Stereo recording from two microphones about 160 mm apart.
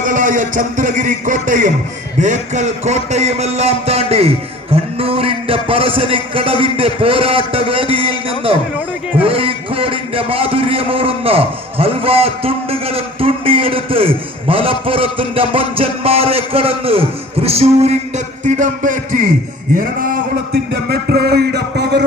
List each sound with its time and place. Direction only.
0.0 s a man's voice: 55° right (ahead or behind)
18.4 s music: 50° right (ahead or behind)
20.5 s music: 90° right